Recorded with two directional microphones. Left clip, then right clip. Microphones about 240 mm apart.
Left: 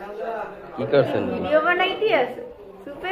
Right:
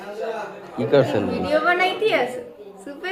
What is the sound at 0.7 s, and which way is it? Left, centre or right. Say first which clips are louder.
A woman's voice: right 2 dB; right.